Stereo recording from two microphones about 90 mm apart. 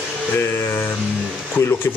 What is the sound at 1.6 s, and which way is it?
Speech, 25° left (ahead or behind).